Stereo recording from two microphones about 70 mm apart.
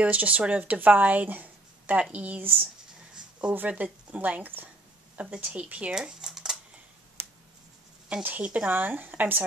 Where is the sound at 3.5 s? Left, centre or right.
Right.